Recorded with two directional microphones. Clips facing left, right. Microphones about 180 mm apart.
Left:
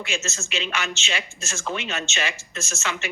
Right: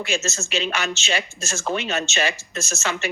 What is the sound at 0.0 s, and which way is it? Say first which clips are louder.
Speech: right 5 dB; 40° right (ahead or behind).